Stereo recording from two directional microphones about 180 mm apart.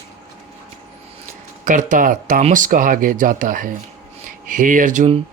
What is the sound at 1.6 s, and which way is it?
Speech, 45° right (ahead or behind).